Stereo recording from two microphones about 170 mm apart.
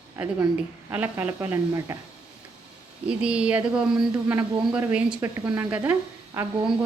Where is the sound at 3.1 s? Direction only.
5° right (ahead or behind).